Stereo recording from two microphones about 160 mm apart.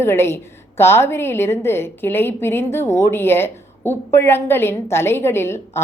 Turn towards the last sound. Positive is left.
turn(degrees=15)  # may be behind; listen again after turning